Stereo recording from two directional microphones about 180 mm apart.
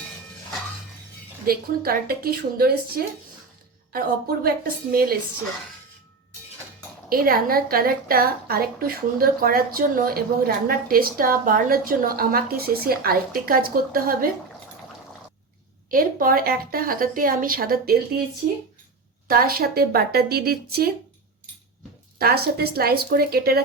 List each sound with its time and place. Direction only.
1.5 s a woman's voice: 55° right (ahead or behind)
4.4 s a woman's voice: 55° right (ahead or behind)
7.1 s a woman's voice: 55° right (ahead or behind)
15.9 s speech: 50° right (ahead or behind)
19.3 s a woman's voice: 55° right (ahead or behind)
22.2 s a woman's voice: 60° right (ahead or behind)